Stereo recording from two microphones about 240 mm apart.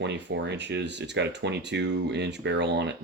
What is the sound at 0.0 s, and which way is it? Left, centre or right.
Speech, right.